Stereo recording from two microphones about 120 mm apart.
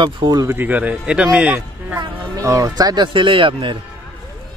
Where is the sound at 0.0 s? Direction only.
35° right (ahead or behind).